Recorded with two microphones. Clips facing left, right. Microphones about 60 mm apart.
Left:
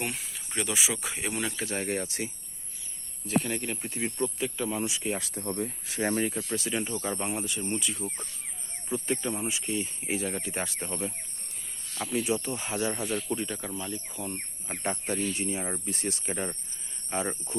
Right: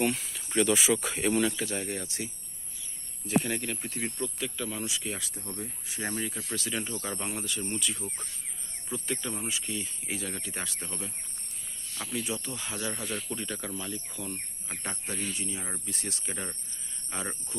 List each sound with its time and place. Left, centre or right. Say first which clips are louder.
0.0 s speech: right 6 dB; centre
1.7 s speech: left 3 dB; left
3.2 s speech: even; centre; by 5.2 s left
5.2 s speech: left 7 dB; left
6.6 s speech: left 3 dB; centre
8.9 s speech: left 4 dB; left
11.9 s speech: left 5 dB; centre
12.3 s speech: left 6 dB; left
12.9 s speech: left 5 dB; centre
14.8 s speech: left 7 dB; left
16.1 s speech: left 5 dB; left